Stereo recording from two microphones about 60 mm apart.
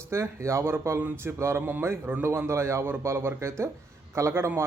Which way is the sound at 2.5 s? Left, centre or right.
Right.